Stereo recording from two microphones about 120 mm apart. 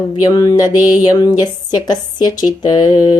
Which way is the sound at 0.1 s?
35° left (ahead or behind).